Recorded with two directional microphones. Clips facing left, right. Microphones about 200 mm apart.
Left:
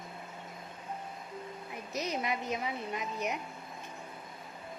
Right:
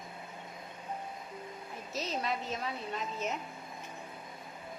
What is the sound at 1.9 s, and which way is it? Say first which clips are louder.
A woman's voice: left 1 dB; 15° left (ahead or behind).